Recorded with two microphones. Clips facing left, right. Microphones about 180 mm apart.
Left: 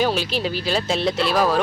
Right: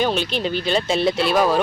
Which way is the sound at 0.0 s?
5° left (ahead or behind).